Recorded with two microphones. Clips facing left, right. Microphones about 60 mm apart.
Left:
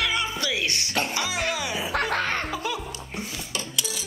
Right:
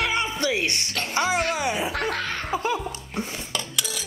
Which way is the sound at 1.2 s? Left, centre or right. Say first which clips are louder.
Right 4 dB; right.